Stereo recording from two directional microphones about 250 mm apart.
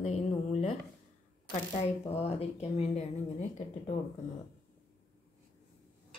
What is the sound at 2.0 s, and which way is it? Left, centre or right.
Speech, left.